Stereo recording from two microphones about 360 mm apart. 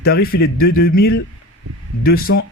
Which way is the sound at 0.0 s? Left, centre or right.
Left.